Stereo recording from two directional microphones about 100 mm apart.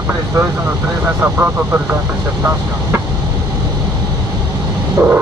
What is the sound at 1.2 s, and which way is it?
Speech, 15° right (ahead or behind).